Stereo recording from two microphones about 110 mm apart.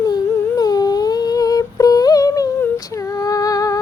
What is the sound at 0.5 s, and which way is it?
Humming, 35° left (ahead or behind).